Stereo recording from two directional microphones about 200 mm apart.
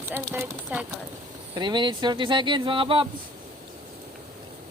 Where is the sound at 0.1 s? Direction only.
10° right (ahead or behind).